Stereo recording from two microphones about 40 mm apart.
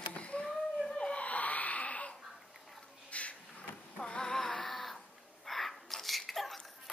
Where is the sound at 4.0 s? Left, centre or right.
Left.